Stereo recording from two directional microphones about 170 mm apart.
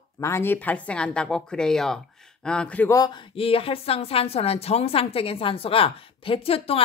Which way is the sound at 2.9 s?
25° left (ahead or behind).